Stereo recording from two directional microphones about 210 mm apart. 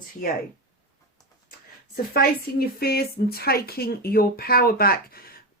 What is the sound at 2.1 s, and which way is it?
Speech, 45° left (ahead or behind).